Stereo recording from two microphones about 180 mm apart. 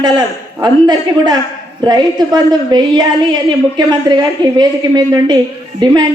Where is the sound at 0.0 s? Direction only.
25° right (ahead or behind).